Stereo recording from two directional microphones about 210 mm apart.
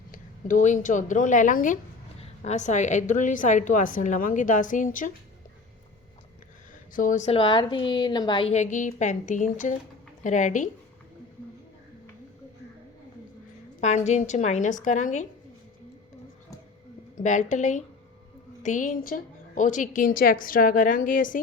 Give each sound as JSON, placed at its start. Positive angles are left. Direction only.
{"t": 0.1, "sound": "a woman's voice", "side_deg": 35}
{"t": 6.9, "sound": "a woman's voice", "side_deg": 40}
{"t": 8.5, "sound": "a woman's voice", "side_deg": 35}
{"t": 13.8, "sound": "a woman's voice", "side_deg": 35}
{"t": 17.2, "sound": "a woman's voice", "side_deg": 35}